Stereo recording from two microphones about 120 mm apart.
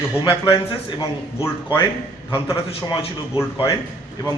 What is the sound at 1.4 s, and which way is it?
Speech, 20° left (ahead or behind).